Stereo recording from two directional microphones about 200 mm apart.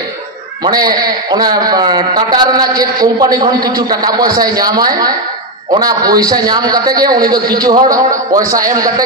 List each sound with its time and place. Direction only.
0.7 s a man's voice: 20° right (ahead or behind)